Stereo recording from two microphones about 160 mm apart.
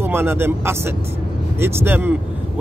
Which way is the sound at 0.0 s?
15° right (ahead or behind).